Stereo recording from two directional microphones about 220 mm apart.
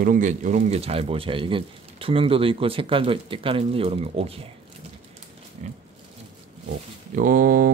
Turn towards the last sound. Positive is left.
turn(degrees=-40)  # may be behind; listen again after turning